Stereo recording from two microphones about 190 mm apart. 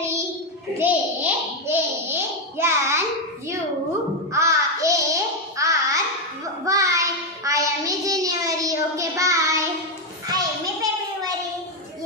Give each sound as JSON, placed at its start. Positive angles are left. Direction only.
{"t": 0.7, "sound": "babbling", "side_deg": -10}
{"t": 4.3, "sound": "a sound", "side_deg": -15}
{"t": 6.6, "sound": "child singing", "side_deg": -15}